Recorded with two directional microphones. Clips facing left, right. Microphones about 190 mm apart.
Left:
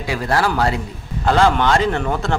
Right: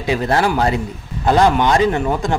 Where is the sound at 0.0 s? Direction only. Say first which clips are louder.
Right 3 dB; 20° right (ahead or behind).